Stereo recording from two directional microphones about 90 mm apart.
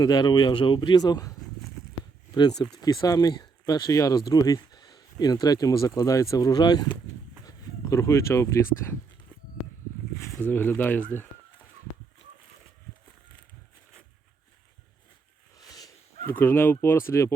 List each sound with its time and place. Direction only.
0.0 s speech: 50° left (ahead or behind)
7.4 s speech: 35° left (ahead or behind)
10.2 s speech: 30° left (ahead or behind)
15.5 s a sound: 45° left (ahead or behind)
16.2 s speech: 25° left (ahead or behind)